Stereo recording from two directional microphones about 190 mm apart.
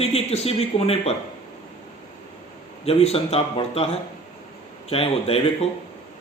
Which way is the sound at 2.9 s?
30° left (ahead or behind).